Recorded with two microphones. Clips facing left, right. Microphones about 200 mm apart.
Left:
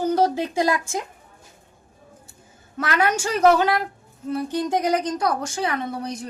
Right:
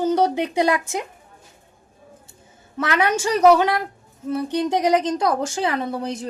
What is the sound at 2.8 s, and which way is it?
Speech, 20° right (ahead or behind).